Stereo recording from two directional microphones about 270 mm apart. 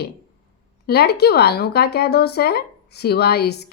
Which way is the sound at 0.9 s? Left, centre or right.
Left.